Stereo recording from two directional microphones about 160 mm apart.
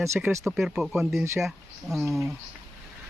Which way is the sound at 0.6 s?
Centre (ahead or behind).